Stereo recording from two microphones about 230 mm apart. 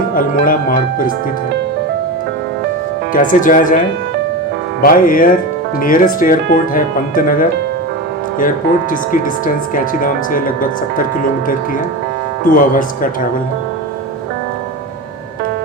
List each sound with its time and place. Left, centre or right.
0.1 s music: left
3.1 s speech: left
4.8 s speech: left
12.5 s speech: left